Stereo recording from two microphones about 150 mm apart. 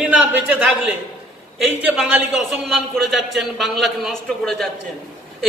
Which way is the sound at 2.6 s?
Centre (ahead or behind).